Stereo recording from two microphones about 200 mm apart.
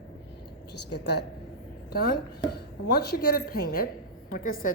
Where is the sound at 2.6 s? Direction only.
50° left (ahead or behind).